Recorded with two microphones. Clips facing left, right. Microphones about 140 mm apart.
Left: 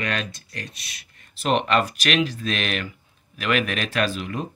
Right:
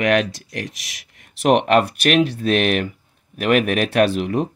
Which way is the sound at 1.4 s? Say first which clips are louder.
Right 6 dB; 65° right (ahead or behind).